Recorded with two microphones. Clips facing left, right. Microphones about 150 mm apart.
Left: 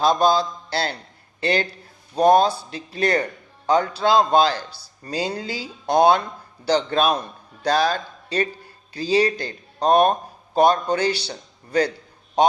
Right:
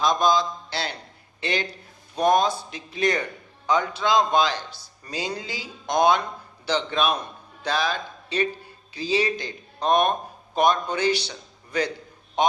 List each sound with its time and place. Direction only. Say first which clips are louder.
0.0 s a man's voice: left 3 dB; 35° left (ahead or behind)